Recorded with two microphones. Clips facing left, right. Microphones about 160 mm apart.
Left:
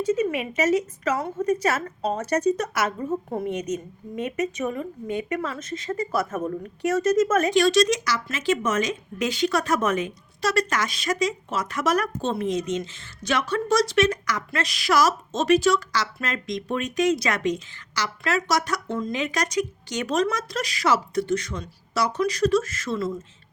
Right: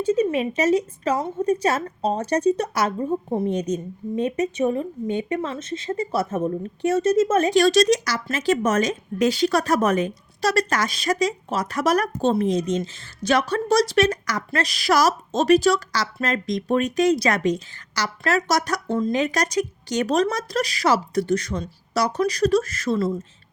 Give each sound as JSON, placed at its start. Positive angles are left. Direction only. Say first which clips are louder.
{"t": 0.0, "sound": "a woman's voice", "louder": "right 3 dB", "side_deg": -30}